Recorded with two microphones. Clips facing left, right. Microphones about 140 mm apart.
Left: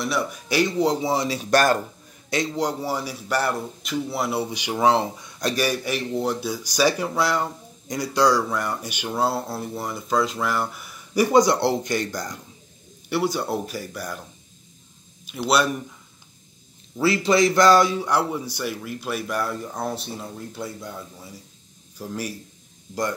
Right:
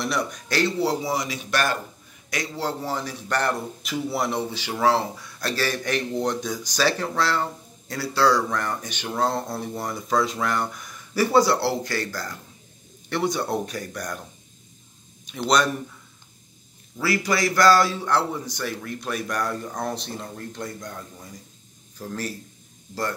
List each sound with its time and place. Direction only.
0.0 s speech: 5° left (ahead or behind); by 1.8 s 40° left (ahead or behind)
2.2 s a man's voice: 25° left (ahead or behind)
13.1 s speech: 5° left (ahead or behind)
15.2 s speech: 5° left (ahead or behind)
17.0 s a man's voice: 25° left (ahead or behind)